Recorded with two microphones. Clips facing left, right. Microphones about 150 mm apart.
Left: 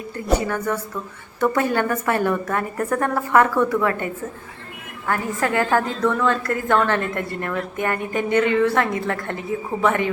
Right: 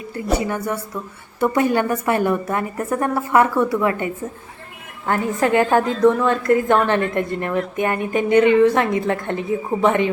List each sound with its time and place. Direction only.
0.3 s a woman's voice: 10° right (ahead or behind)
5.0 s a woman's voice: 20° right (ahead or behind)